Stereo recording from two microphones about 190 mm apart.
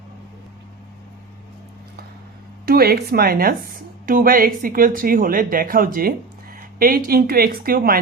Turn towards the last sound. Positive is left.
turn(degrees=-50)  # may be behind; listen again after turning